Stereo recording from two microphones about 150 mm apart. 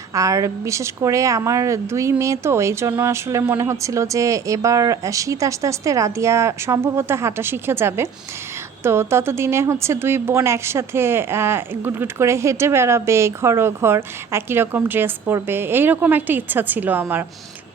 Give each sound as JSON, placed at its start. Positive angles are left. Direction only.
{"t": 0.1, "sound": "a woman's voice", "side_deg": -20}